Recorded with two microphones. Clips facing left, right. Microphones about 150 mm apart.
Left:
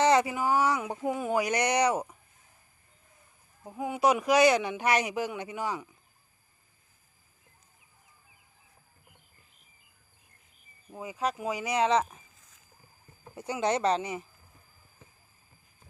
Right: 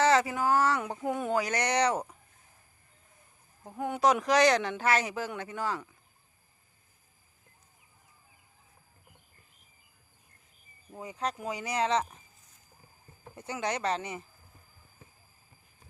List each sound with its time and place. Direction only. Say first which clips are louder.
0.0 s speech: left 1 dB; 15° left (ahead or behind)
1.4 s speech: left 3 dB; 15° left (ahead or behind)
3.6 s speech: even; 5° left (ahead or behind)
10.9 s speech: left 3 dB; 10° left (ahead or behind)
13.3 s speech: left 4 dB; 10° left (ahead or behind)
13.6 s speech: left 5 dB; 25° left (ahead or behind)